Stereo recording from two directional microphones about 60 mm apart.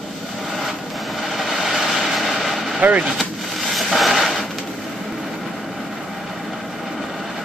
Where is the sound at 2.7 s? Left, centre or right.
Right.